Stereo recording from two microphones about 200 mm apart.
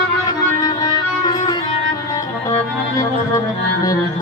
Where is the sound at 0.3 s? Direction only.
20° left (ahead or behind).